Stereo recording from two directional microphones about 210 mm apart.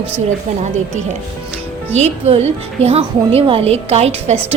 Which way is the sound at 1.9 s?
30° right (ahead or behind).